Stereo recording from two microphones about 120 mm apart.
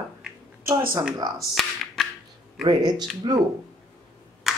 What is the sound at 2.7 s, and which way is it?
Speech, 35° right (ahead or behind).